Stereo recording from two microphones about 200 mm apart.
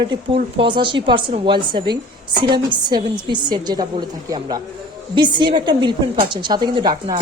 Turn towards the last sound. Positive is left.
turn(degrees=-25)  # may be behind; listen again after turning